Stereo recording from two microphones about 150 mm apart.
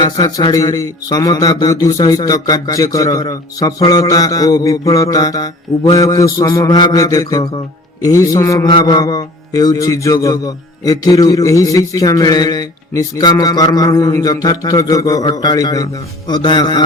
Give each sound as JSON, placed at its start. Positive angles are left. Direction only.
{"t": 0.0, "sound": "a man's voice", "side_deg": 25}